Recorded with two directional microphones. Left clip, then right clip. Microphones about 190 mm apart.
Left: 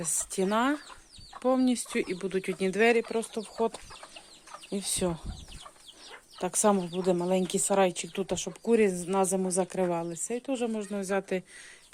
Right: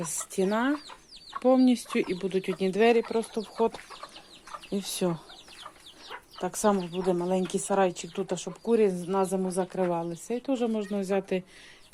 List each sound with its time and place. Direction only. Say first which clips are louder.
0.0 s speech: right 1 dB; 15° left (ahead or behind)
1.4 s speech: right 4 dB; 5° left (ahead or behind)
6.4 s a woman's voice: even; 25° left (ahead or behind)
10.2 s speech: right 4 dB; 10° left (ahead or behind)